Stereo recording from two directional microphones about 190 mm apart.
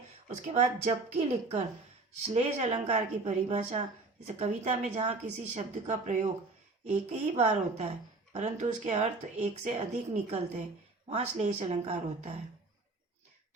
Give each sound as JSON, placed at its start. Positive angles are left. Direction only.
{"t": 0.3, "sound": "a woman's voice", "side_deg": -40}